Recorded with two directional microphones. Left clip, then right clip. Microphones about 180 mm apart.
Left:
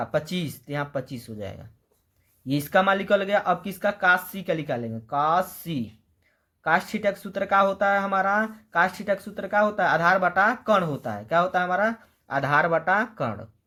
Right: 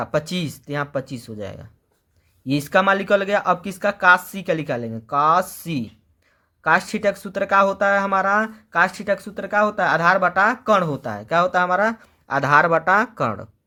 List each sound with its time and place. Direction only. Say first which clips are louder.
0.0 s speech: right 4 dB; 30° right (ahead or behind)